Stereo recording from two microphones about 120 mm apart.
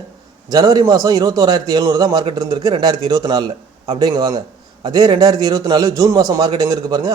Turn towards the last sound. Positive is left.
turn(degrees=-30)  # may be behind; listen again after turning